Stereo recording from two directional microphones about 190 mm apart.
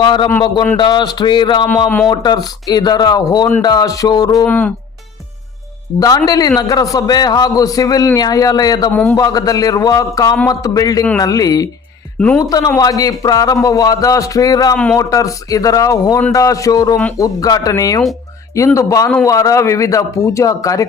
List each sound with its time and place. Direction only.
0.0 s a man's voice: 25° left (ahead or behind)
4.4 s a man's voice: 10° left (ahead or behind)
6.0 s a man's voice: 20° left (ahead or behind)
8.9 s a man's voice: 10° left (ahead or behind)
9.1 s a man's voice: 20° left (ahead or behind)